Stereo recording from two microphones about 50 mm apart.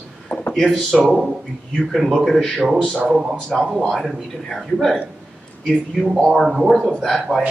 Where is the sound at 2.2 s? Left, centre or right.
Centre.